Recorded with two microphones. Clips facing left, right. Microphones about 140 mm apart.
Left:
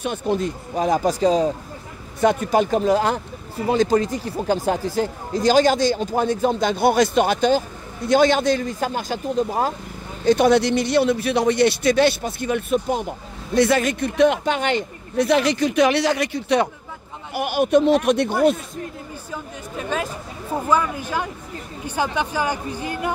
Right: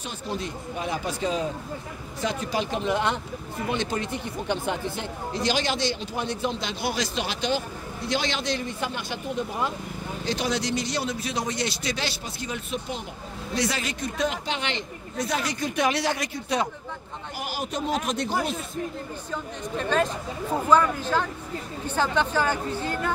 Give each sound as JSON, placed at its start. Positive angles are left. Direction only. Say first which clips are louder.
{"t": 0.0, "sound": "speech", "louder": "left 10 dB", "side_deg": 60}
{"t": 0.7, "sound": "speech", "louder": "left 11 dB", "side_deg": 40}
{"t": 2.1, "sound": "speech", "louder": "left 10 dB", "side_deg": 55}
{"t": 10.2, "sound": "speech", "louder": "left 12 dB", "side_deg": 55}
{"t": 15.1, "sound": "speech", "louder": "left 10 dB", "side_deg": 70}
{"t": 19.3, "sound": "speech", "louder": "right 1 dB", "side_deg": 5}